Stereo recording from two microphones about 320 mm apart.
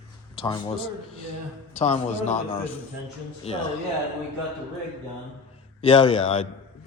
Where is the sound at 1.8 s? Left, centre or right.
Centre.